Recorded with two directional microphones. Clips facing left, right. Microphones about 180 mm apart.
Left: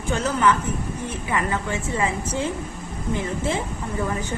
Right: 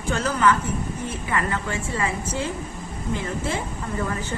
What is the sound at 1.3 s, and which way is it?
Speech, 20° left (ahead or behind).